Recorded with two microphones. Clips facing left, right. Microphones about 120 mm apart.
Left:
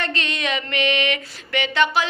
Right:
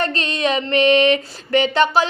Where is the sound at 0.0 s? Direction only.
35° right (ahead or behind).